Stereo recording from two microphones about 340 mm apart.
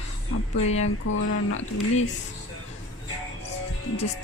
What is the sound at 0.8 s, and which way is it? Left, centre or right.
Music, left.